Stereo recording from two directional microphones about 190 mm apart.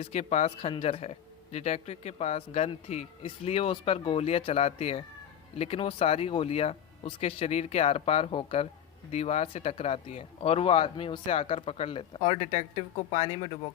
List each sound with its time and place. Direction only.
0.0 s speech: 35° left (ahead or behind)